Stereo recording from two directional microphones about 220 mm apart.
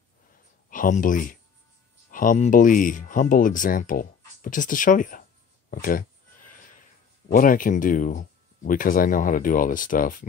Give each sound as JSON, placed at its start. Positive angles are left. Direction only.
{"t": 0.7, "sound": "speech", "side_deg": 35}
{"t": 5.7, "sound": "a sound", "side_deg": 40}
{"t": 7.2, "sound": "speech", "side_deg": 40}